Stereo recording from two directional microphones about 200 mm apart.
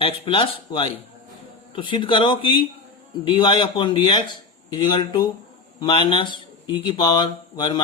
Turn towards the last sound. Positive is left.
turn(degrees=25)  # may be behind; listen again after turning